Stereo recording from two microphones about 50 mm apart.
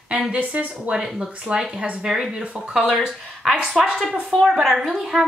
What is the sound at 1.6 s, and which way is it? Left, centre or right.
Speech, right.